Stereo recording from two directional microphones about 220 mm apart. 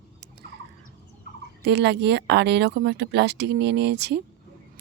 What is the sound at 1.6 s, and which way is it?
Speech, 50° right (ahead or behind).